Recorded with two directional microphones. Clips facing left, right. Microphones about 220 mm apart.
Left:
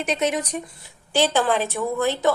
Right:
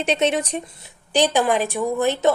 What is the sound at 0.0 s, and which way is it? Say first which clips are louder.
Speech: right 3 dB; 30° right (ahead or behind).